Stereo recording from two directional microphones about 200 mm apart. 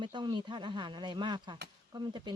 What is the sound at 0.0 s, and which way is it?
Speech, 25° right (ahead or behind).